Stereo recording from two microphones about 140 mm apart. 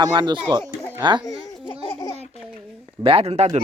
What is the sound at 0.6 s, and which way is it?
Speech, 15° left (ahead or behind).